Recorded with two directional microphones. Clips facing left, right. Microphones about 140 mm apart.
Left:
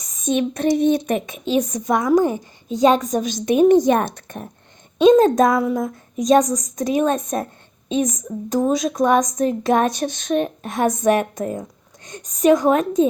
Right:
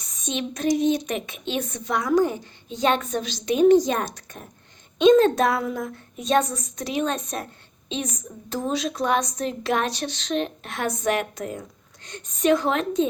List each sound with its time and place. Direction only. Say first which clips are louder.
0.1 s speech: left 9 dB; 50° left (ahead or behind)
5.2 s speech: left 5 dB; 45° left (ahead or behind)